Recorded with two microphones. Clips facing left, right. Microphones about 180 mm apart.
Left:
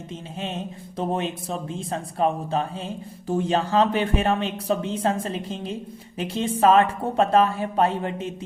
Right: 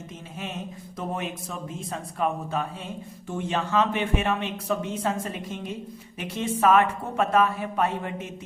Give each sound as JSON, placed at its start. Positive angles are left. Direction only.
{"t": 0.3, "sound": "a woman's voice", "side_deg": 30}